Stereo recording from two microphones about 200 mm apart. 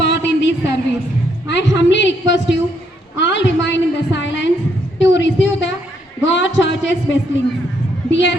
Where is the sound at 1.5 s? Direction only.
60° left (ahead or behind).